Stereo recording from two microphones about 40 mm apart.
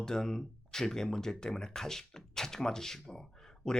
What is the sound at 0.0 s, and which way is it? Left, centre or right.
Speech, centre.